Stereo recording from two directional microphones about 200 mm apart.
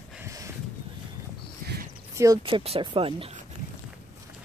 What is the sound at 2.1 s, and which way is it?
Speech, 15° right (ahead or behind).